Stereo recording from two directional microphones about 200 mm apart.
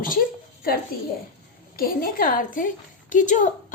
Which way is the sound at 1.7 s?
45° left (ahead or behind).